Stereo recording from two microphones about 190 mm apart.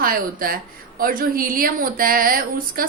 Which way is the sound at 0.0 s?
50° right (ahead or behind).